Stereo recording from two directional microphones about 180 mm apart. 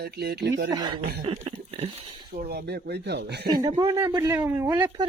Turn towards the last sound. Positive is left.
turn(degrees=-15)  # may be behind; listen again after turning